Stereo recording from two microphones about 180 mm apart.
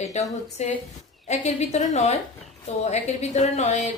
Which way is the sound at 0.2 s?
40° left (ahead or behind).